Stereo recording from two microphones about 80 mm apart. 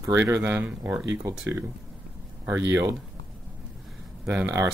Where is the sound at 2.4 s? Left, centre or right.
Right.